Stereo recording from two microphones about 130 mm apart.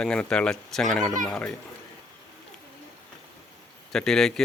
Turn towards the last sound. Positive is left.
turn(degrees=5)  # may be behind; listen again after turning